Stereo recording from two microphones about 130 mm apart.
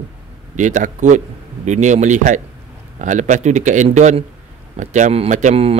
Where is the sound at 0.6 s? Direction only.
70° right (ahead or behind).